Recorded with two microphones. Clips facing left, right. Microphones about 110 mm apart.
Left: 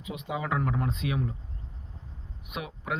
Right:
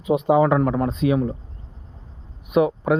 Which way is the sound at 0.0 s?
40° right (ahead or behind).